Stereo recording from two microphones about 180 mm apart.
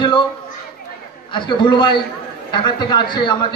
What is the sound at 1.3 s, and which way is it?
A man's voice, 25° left (ahead or behind).